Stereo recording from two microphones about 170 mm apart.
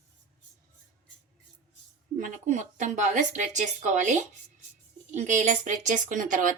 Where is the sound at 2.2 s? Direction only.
50° right (ahead or behind).